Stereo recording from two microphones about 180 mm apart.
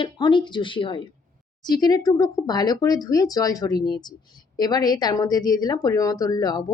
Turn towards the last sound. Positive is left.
turn(degrees=20)  # may be behind; listen again after turning